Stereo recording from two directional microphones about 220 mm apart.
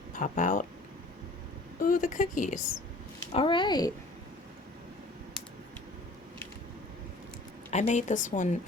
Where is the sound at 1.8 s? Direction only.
40° left (ahead or behind).